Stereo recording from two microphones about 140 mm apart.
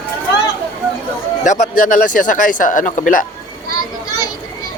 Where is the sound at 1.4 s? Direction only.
75° left (ahead or behind).